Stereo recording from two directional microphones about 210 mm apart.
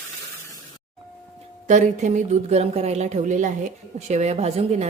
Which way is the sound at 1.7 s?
35° right (ahead or behind).